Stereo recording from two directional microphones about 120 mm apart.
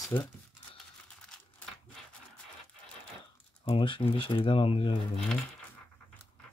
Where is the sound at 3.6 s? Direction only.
45° left (ahead or behind).